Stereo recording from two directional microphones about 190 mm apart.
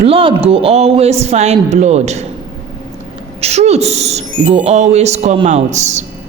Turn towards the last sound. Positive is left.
turn(degrees=-35)  # may be behind; listen again after turning